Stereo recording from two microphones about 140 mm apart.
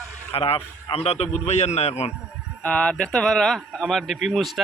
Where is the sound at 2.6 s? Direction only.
10° left (ahead or behind).